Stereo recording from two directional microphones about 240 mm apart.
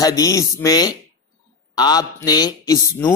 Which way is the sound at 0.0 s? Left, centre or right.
Centre.